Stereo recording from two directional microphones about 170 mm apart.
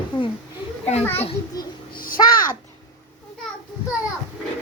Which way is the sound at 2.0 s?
55° left (ahead or behind).